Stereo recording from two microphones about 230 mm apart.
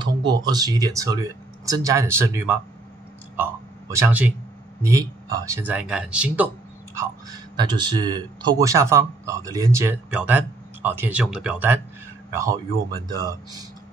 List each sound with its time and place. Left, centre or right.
0.0 s speech: centre
3.9 s speech: centre
7.0 s speech: centre